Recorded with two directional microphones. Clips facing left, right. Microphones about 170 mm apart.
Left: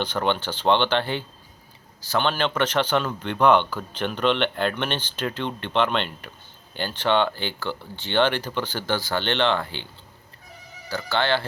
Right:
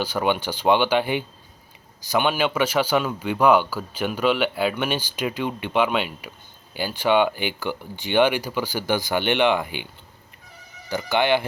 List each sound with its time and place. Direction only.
0.0 s speech: 10° right (ahead or behind)